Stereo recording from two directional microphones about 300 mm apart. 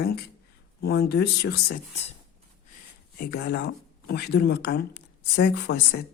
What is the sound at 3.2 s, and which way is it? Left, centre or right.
A woman's voice, left.